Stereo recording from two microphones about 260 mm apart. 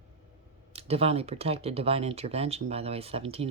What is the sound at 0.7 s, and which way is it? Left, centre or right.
Speech, right.